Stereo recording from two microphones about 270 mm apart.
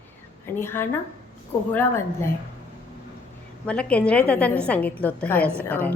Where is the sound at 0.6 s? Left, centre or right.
Centre.